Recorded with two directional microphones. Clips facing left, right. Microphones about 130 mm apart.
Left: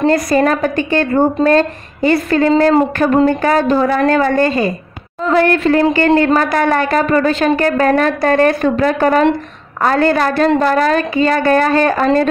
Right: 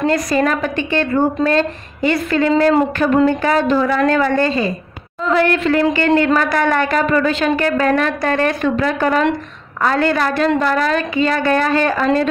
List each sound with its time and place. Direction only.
0.0 s a woman's voice: 35° left (ahead or behind)